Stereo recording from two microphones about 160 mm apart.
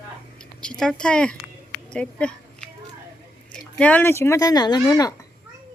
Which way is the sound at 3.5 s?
10° left (ahead or behind).